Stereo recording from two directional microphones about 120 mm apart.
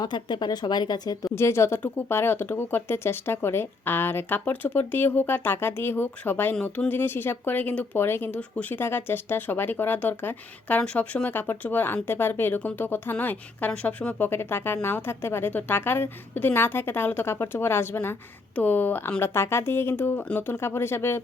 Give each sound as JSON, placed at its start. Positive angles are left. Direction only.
{"t": 0.0, "sound": "speech", "side_deg": 40}
{"t": 1.4, "sound": "a woman's voice", "side_deg": 20}